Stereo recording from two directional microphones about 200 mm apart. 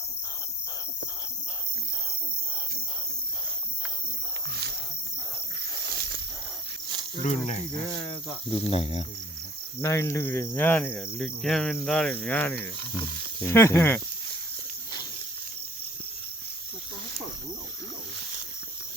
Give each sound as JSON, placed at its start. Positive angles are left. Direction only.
{"t": 5.5, "sound": "snake", "side_deg": -50}
{"t": 7.2, "sound": "speech", "side_deg": 35}
{"t": 9.8, "sound": "cricket", "side_deg": 15}